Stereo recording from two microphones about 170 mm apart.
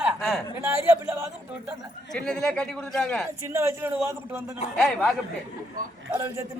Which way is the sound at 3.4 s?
15° right (ahead or behind).